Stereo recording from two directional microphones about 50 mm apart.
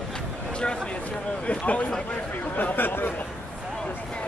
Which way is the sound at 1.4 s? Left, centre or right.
Left.